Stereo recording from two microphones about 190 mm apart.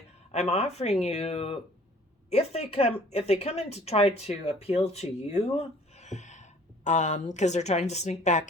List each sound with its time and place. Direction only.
0.3 s speech: 35° left (ahead or behind)